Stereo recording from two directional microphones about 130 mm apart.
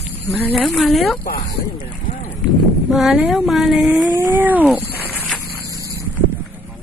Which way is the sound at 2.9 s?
Centre (ahead or behind).